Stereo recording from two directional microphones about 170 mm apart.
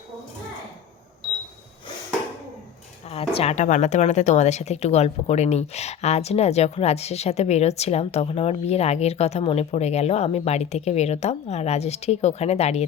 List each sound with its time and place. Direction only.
3.1 s speech: 35° left (ahead or behind)